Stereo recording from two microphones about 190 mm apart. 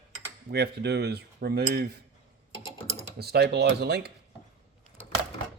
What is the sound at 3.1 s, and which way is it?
Speech, 55° right (ahead or behind).